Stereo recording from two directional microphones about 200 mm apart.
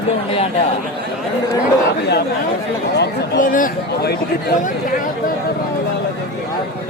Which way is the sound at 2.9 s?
50° left (ahead or behind).